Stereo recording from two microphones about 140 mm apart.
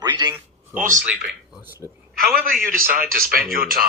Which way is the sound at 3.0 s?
90° right.